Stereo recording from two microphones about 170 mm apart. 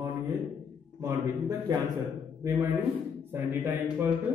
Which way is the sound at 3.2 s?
10° right (ahead or behind).